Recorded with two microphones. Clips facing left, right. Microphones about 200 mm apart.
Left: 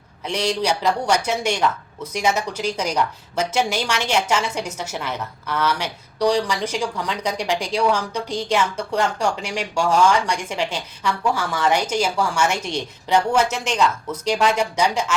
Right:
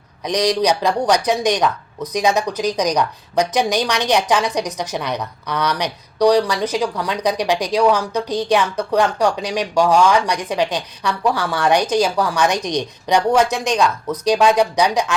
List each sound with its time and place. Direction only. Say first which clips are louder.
0.2 s a woman's voice: right 5 dB; 15° right (ahead or behind)